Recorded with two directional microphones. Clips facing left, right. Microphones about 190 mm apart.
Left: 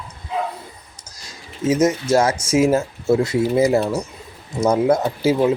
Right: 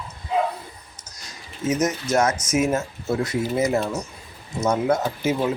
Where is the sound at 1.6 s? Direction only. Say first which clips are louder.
Left 6 dB; 30° left (ahead or behind).